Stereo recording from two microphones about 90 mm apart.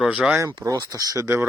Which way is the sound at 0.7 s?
40° right (ahead or behind).